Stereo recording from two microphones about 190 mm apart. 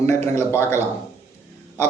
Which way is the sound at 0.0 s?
15° left (ahead or behind).